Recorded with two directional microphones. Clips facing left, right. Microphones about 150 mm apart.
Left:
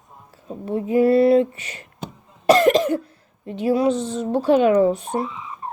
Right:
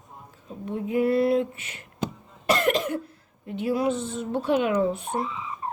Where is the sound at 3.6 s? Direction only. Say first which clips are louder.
Left 6 dB; 30° left (ahead or behind).